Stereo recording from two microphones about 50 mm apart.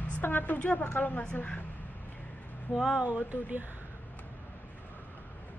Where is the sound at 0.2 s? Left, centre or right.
Left.